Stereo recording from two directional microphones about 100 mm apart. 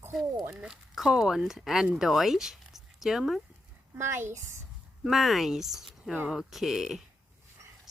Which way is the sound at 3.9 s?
25° right (ahead or behind).